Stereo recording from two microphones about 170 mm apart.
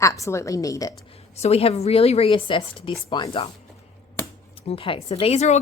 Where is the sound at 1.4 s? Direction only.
35° left (ahead or behind).